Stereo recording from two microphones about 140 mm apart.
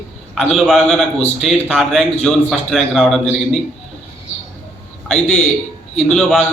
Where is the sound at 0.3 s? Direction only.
Centre (ahead or behind).